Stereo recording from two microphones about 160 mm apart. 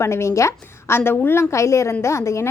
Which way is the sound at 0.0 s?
15° left (ahead or behind).